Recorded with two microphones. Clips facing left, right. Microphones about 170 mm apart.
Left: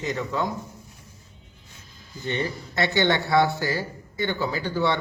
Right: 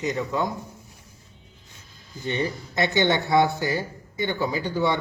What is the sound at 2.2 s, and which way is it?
Speech, 15° right (ahead or behind).